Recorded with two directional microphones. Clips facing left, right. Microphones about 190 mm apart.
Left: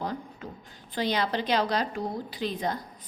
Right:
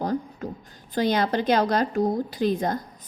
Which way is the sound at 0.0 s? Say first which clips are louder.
Right 7 dB; 40° right (ahead or behind).